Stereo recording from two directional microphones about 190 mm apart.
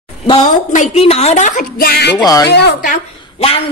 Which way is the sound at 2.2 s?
20° left (ahead or behind).